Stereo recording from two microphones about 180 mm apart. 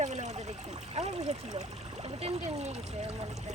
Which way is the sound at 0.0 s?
40° right (ahead or behind).